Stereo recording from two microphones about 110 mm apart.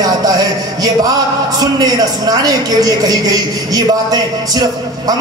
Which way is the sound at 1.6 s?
35° right (ahead or behind).